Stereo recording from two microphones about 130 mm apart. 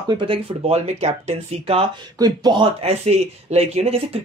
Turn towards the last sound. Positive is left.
turn(degrees=-55)  # may be behind; listen again after turning